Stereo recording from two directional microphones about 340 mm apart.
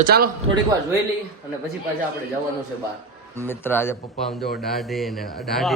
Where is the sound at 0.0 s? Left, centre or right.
Right.